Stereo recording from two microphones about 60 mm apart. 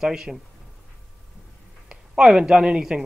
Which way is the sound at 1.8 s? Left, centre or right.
Centre.